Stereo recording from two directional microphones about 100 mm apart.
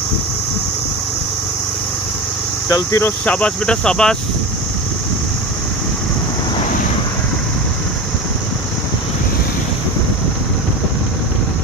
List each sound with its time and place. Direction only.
2.7 s speech: 30° left (ahead or behind)
3.3 s speech: 10° left (ahead or behind)